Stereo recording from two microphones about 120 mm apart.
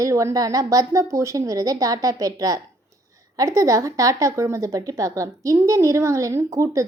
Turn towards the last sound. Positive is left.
turn(degrees=-25)  # may be behind; listen again after turning